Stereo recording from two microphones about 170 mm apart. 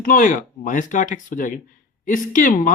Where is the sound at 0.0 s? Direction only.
50° left (ahead or behind).